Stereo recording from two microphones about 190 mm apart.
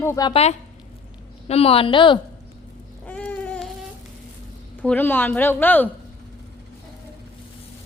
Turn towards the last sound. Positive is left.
turn(degrees=10)  # may be behind; listen again after turning